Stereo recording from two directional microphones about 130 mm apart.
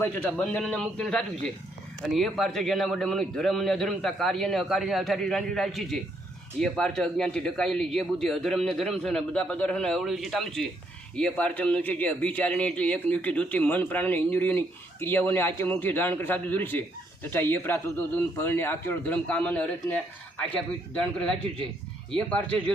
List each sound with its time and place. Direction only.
0.0 s a man's voice: 10° left (ahead or behind)